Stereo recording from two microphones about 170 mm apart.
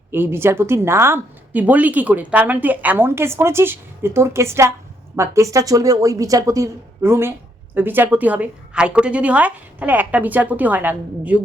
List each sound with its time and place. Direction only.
0.1 s a woman's voice: 15° right (ahead or behind)